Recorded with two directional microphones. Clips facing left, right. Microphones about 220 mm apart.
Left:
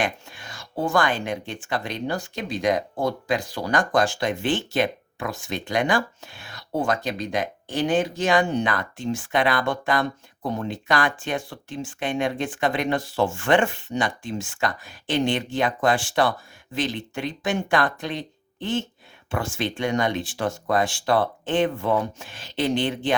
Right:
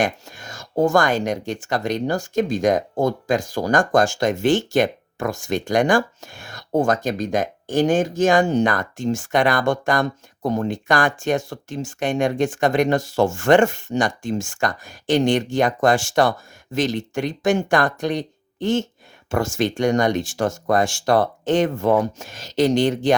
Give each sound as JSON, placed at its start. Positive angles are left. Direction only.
{"t": 0.0, "sound": "speech", "side_deg": -45}